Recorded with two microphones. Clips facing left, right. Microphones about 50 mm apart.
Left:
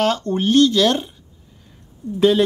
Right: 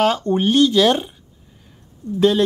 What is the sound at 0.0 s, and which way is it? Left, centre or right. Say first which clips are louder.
Speech: right 2 dB; centre.